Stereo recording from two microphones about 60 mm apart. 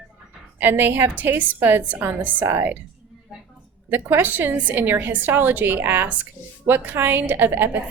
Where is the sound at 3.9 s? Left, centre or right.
Right.